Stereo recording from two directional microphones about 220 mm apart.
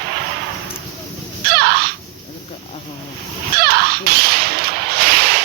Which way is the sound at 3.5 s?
45° right (ahead or behind).